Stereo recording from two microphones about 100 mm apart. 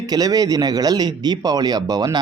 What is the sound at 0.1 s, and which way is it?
Speech, 40° right (ahead or behind).